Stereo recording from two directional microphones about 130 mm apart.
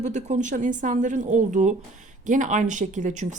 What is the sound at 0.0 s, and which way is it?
Speech, 65° right (ahead or behind).